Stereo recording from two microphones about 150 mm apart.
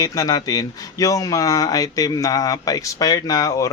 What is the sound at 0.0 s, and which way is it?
Speech, 25° left (ahead or behind).